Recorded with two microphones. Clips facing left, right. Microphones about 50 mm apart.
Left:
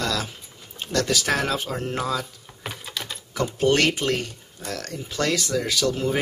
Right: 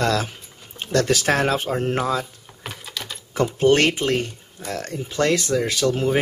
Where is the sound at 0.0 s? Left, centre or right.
Right.